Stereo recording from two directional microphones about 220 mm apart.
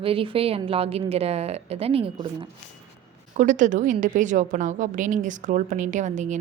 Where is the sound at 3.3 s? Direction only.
35° right (ahead or behind).